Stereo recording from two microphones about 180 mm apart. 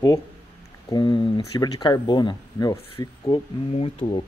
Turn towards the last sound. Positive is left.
turn(degrees=30)  # may be behind; listen again after turning